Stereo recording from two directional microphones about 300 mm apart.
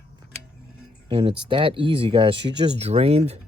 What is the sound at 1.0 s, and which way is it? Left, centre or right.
Speech, centre.